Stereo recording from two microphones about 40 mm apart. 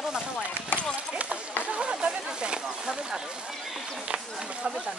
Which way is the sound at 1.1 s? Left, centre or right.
Right.